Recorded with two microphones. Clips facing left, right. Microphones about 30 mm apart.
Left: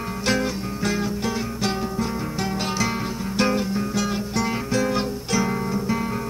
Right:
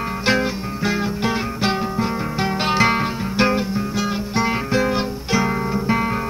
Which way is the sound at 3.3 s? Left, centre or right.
Right.